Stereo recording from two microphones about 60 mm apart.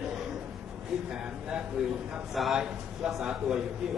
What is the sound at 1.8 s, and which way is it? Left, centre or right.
A man's voice, centre.